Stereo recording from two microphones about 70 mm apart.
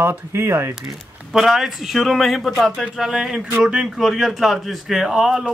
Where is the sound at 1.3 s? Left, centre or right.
Centre.